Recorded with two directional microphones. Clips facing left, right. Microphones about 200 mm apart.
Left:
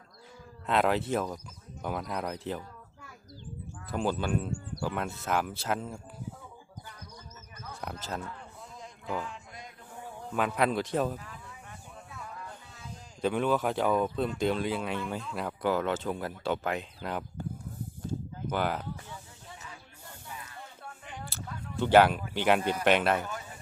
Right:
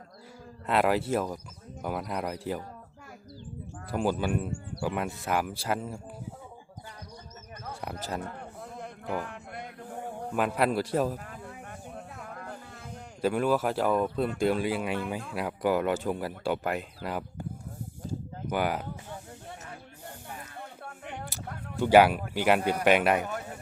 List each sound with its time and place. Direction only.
0.7 s speech: 5° right (ahead or behind)
3.9 s speech: 10° right (ahead or behind)
7.8 s speech: 10° right (ahead or behind)
8.2 s a sound: 60° right (ahead or behind)
10.3 s speech: 5° right (ahead or behind)
11.2 s a sound: 55° right (ahead or behind)
13.2 s speech: 5° right (ahead or behind)
18.4 s speech: 10° right (ahead or behind)
19.1 s snake: 60° right (ahead or behind)
20.2 s a sound: 55° right (ahead or behind)
21.8 s speech: 10° right (ahead or behind)
23.2 s a sound: 60° right (ahead or behind)